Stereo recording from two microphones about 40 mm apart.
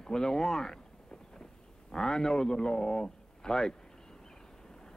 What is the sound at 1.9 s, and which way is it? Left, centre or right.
Speech, centre.